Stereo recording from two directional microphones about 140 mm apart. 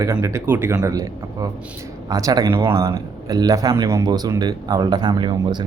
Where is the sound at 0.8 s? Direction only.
25° right (ahead or behind).